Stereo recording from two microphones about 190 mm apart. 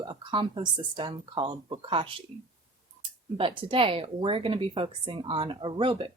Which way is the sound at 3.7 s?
30° right (ahead or behind).